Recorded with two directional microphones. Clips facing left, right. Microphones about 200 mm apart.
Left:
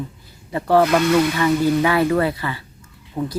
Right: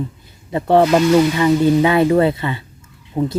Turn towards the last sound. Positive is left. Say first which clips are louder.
# right 5 dB
turn(degrees=-25)  # may be behind; listen again after turning